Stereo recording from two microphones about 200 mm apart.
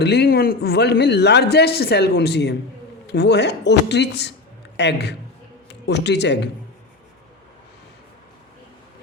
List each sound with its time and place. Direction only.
0.0 s a man's voice: 55° left (ahead or behind)